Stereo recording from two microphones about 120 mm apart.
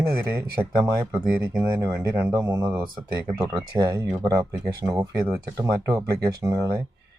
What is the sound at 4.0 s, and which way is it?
Speech, 20° right (ahead or behind).